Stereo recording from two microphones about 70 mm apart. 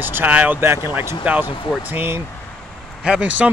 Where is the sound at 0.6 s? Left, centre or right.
Right.